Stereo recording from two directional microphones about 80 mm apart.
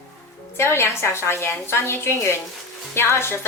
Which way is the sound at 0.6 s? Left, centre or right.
Left.